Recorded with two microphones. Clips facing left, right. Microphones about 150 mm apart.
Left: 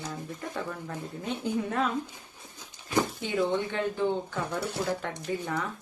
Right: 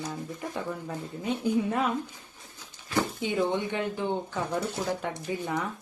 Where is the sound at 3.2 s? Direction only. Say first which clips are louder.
Even; 20° right (ahead or behind).